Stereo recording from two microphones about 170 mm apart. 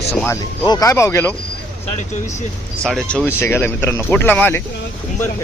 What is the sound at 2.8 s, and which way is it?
Speech, centre (ahead or behind).